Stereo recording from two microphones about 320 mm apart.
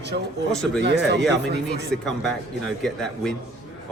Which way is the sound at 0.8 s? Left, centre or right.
Right.